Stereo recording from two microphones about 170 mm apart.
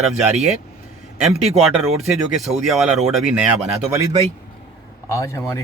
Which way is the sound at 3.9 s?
15° right (ahead or behind).